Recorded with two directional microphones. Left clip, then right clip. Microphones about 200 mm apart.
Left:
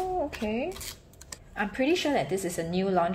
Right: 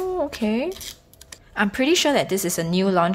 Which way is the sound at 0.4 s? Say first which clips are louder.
Right 6 dB; 30° right (ahead or behind).